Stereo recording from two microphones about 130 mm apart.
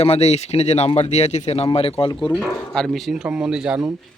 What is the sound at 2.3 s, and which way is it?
Speech, 5° left (ahead or behind).